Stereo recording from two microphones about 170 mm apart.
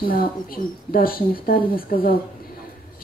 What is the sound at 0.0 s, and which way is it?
Speech, 60° left (ahead or behind).